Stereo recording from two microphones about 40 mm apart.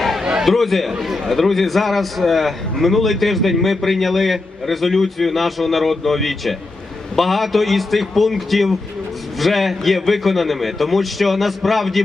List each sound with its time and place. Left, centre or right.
0.4 s a man's voice: centre